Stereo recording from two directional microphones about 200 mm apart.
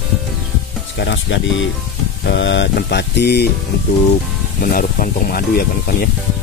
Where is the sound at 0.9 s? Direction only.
60° left (ahead or behind).